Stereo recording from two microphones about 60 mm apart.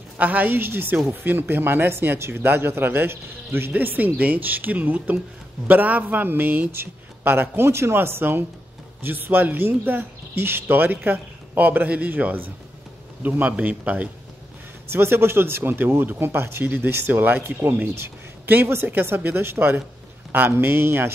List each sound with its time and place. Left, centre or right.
0.2 s speech: right
3.7 s speech: right
14.9 s speech: right